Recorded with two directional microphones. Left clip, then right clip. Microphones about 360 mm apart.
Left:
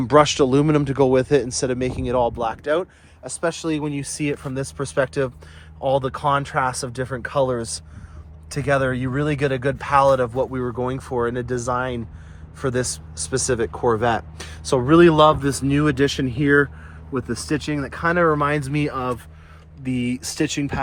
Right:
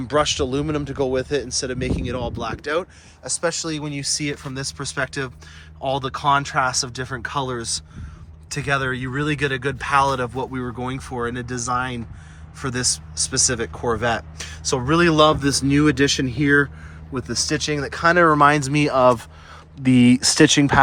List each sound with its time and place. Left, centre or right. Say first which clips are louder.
0.0 s speech: left 5 dB; centre